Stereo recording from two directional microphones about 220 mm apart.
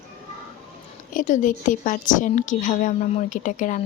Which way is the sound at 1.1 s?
35° left (ahead or behind).